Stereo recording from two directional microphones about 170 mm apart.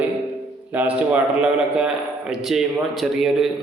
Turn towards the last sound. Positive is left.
turn(degrees=0)  # may be behind; listen again after turning